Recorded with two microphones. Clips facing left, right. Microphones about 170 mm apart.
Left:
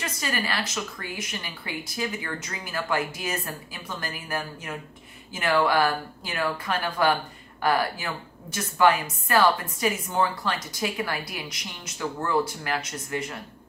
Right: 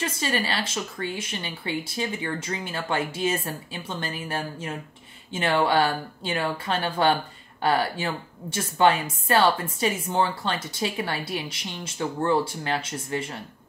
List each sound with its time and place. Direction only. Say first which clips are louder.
0.0 s a woman's voice: right 3 dB; 30° right (ahead or behind)